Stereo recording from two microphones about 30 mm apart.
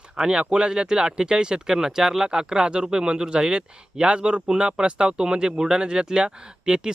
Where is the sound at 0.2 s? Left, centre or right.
Right.